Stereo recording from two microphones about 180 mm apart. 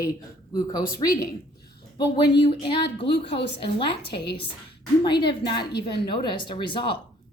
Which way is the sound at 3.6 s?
30° left (ahead or behind).